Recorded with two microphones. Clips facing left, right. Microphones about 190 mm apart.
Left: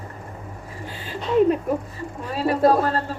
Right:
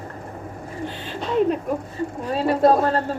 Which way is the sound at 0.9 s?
5° left (ahead or behind).